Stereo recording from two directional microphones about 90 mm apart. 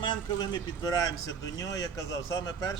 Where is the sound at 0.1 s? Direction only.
55° left (ahead or behind).